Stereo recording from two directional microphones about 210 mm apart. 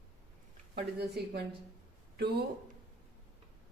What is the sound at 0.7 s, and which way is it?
A woman's voice, 50° right (ahead or behind).